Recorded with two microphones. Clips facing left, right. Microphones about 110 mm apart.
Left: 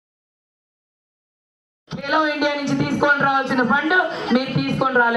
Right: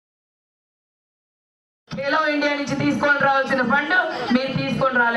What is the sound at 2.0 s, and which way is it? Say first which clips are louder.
A woman's voice: left 1 dB; 10° left (ahead or behind).